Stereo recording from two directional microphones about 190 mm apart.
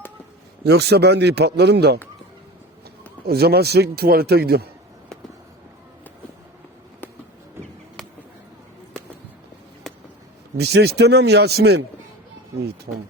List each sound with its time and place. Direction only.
0.6 s speech: 60° right (ahead or behind)
3.2 s speech: 55° right (ahead or behind)
9.9 s a sound: 5° left (ahead or behind)
10.6 s speech: 60° right (ahead or behind)
12.9 s speech: 40° right (ahead or behind)